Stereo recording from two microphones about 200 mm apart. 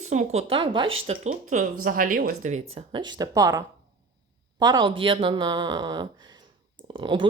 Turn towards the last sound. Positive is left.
turn(degrees=-25)  # may be behind; listen again after turning